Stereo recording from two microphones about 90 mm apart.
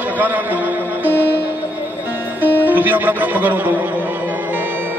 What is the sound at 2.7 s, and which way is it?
A man's voice, 20° right (ahead or behind).